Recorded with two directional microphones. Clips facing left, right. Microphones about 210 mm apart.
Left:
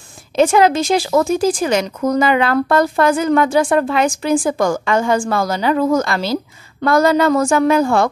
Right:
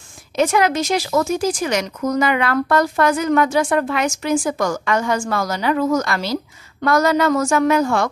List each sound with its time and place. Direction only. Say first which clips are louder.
0.4 s a woman's voice: left 4 dB; 30° left (ahead or behind)